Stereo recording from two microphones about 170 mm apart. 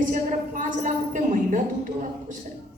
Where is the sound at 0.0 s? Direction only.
50° right (ahead or behind).